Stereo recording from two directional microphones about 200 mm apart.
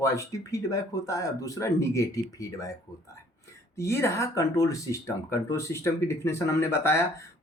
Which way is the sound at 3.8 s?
15° left (ahead or behind).